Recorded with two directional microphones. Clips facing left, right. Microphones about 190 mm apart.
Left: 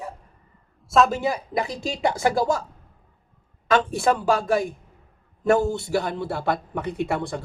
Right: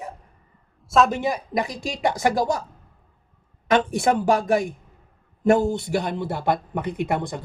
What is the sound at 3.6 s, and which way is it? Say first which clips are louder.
A man's voice: right 1 dB; 20° right (ahead or behind).